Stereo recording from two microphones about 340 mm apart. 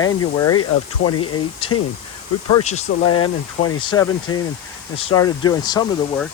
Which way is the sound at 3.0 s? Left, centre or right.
Left.